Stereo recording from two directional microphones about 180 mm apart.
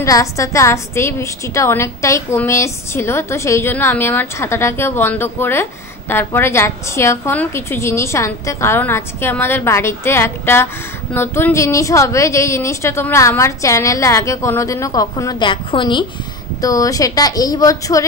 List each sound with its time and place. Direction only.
0.0 s a woman's voice: 15° left (ahead or behind)